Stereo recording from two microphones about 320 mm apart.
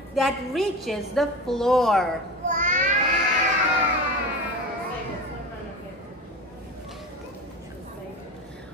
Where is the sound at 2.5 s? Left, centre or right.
Right.